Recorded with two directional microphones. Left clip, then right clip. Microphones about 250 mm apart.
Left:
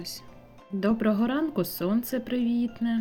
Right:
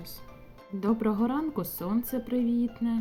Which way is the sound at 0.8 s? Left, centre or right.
Centre.